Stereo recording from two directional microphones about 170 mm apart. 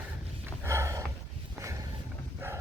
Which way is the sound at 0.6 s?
15° right (ahead or behind).